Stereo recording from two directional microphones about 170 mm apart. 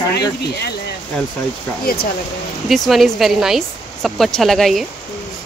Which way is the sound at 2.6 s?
Centre (ahead or behind).